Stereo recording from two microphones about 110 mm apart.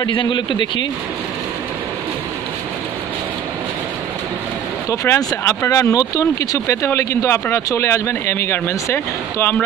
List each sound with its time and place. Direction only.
0.0 s a man's voice: 50° left (ahead or behind)
4.8 s speech: 25° left (ahead or behind)